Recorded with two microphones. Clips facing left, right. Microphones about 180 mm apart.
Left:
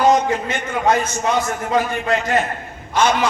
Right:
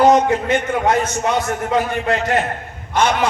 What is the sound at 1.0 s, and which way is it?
A man's voice, 65° right (ahead or behind).